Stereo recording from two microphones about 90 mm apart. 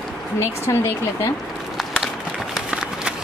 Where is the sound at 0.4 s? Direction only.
30° left (ahead or behind).